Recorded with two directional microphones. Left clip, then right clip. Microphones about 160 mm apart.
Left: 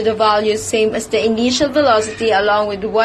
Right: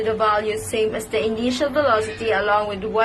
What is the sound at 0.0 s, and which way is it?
A woman's voice, 30° left (ahead or behind).